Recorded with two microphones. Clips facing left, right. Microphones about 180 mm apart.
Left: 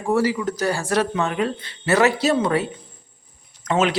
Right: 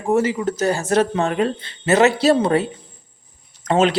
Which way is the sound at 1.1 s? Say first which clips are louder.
Right 3 dB; 35° right (ahead or behind).